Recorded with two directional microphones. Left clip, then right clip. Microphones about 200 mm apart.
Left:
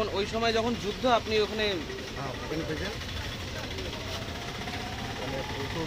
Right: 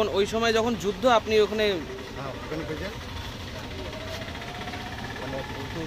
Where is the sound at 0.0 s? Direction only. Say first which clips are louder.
Right 4 dB; 50° right (ahead or behind).